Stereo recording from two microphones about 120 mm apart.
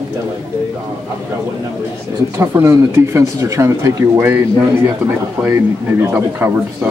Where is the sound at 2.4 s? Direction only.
25° right (ahead or behind).